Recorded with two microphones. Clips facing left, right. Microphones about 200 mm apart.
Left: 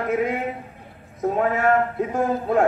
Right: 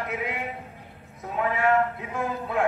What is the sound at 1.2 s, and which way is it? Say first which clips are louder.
A man's voice: left 5 dB; 45° left (ahead or behind).